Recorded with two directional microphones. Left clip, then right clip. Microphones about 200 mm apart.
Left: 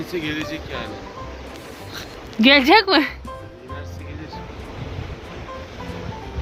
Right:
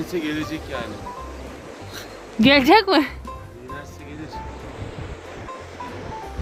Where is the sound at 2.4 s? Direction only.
5° right (ahead or behind).